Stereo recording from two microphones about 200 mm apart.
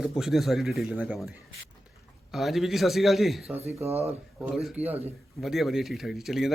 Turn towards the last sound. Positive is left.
turn(degrees=0)  # may be behind; listen again after turning